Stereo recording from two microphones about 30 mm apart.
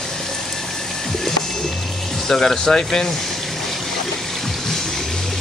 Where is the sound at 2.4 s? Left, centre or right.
Left.